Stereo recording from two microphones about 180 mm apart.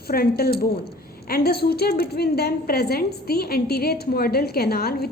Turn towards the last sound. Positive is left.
turn(degrees=60)  # may be behind; listen again after turning